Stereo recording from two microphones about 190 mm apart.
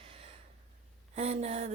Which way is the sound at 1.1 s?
35° right (ahead or behind).